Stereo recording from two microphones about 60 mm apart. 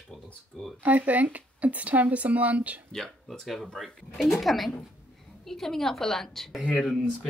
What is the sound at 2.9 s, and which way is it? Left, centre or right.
A woman's voice, centre.